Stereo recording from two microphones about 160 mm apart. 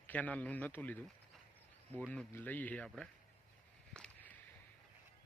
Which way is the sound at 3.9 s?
5° left (ahead or behind).